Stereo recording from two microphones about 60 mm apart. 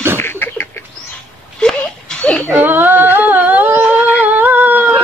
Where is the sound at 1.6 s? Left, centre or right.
Centre.